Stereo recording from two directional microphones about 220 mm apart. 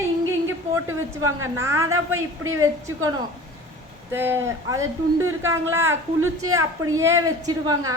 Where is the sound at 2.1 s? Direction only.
70° right (ahead or behind).